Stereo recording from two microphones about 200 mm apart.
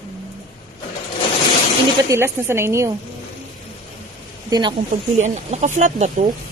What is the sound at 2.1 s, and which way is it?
Speech, 10° right (ahead or behind).